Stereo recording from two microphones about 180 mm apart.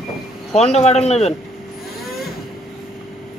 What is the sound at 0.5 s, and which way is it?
Speech, 35° left (ahead or behind).